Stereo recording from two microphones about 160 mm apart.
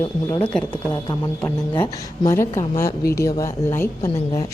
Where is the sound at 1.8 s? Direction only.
15° left (ahead or behind).